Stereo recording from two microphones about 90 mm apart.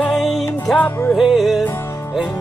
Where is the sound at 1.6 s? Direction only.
25° left (ahead or behind).